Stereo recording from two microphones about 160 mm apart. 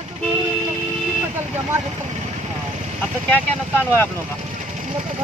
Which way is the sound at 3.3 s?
15° left (ahead or behind).